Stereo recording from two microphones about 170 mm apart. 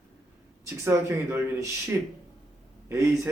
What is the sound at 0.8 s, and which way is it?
Speech, 15° right (ahead or behind).